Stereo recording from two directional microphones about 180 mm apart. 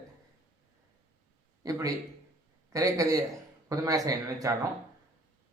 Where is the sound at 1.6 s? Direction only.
20° right (ahead or behind).